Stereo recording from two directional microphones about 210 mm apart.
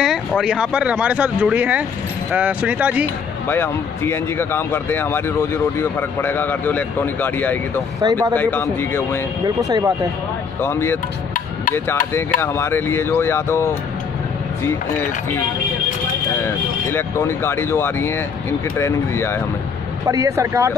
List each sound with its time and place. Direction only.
0.0 s speech: centre (ahead or behind)
3.4 s speech: 10° left (ahead or behind)
8.0 s speech: 20° right (ahead or behind)
8.4 s speech: 10° left (ahead or behind)
9.6 s speech: 15° right (ahead or behind)
10.6 s speech: 10° left (ahead or behind)
12.1 s speech: 10° left (ahead or behind)
16.3 s speech: 10° left (ahead or behind)
20.1 s speech: 15° right (ahead or behind)